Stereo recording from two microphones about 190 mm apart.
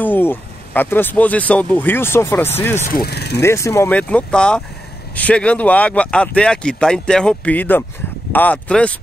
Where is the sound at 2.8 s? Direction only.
55° left (ahead or behind).